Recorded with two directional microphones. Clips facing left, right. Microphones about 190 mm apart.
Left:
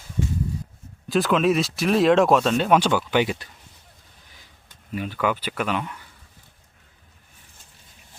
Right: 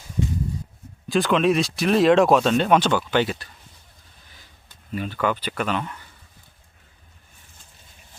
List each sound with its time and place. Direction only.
1.0 s speech: centre (ahead or behind)
4.9 s speech: 10° left (ahead or behind)